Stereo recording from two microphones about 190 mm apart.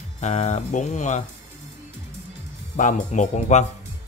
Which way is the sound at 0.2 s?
35° left (ahead or behind).